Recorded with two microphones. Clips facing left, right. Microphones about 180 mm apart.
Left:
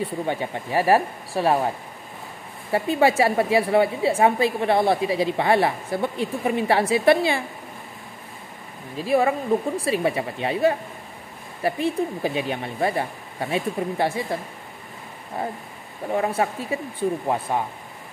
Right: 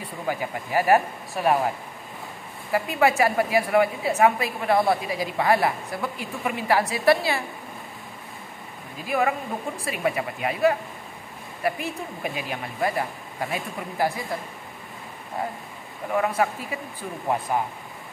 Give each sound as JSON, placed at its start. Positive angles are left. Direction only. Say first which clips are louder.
{"t": 0.0, "sound": "a woman's voice", "louder": "left 3 dB", "side_deg": 30}
{"t": 2.7, "sound": "a woman's voice", "louder": "left 2 dB", "side_deg": 30}
{"t": 8.9, "sound": "a woman's voice", "louder": "left 4 dB", "side_deg": 30}
{"t": 16.1, "sound": "a woman's voice", "louder": "left 1 dB", "side_deg": 30}